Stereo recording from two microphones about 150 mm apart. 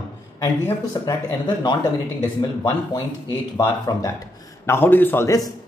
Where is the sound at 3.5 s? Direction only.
25° left (ahead or behind).